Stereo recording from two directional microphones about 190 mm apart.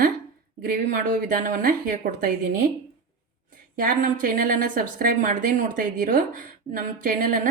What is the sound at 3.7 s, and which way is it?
A woman's voice, 45° right (ahead or behind).